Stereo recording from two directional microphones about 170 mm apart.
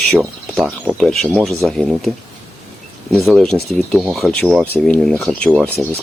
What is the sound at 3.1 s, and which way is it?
Speech, centre (ahead or behind).